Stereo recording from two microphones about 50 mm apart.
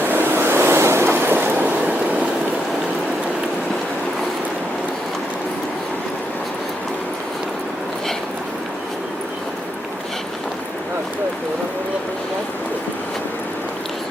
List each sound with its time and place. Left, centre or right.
0.0 s vehicle: right